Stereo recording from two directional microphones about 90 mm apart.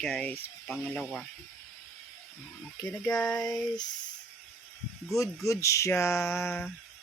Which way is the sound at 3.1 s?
10° left (ahead or behind).